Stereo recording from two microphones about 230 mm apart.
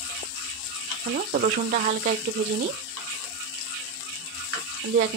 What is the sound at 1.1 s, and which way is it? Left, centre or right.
Speech, right.